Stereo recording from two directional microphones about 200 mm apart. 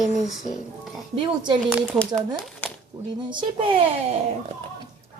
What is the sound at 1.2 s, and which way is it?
Speech, 20° right (ahead or behind).